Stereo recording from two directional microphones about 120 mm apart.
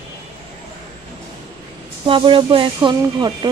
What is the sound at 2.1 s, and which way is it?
Speech, 45° right (ahead or behind).